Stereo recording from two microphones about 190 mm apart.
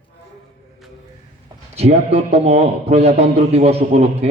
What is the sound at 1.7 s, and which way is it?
A man's voice, 35° right (ahead or behind).